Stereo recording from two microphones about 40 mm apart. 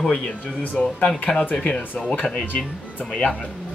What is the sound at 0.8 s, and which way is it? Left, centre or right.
Speech, left.